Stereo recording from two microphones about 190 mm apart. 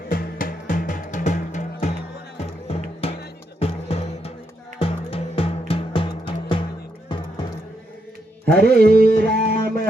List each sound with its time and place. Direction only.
0.1 s music: 50° left (ahead or behind); by 6.7 s 25° left (ahead or behind)
8.4 s music: 55° right (ahead or behind)
9.3 s a sound: 55° right (ahead or behind)